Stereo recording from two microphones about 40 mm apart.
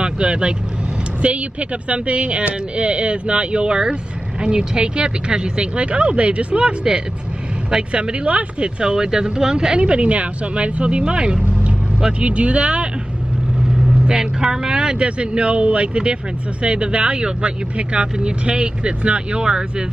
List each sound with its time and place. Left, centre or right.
0.0 s speech: right
8.8 s speech: centre
13.9 s speech: centre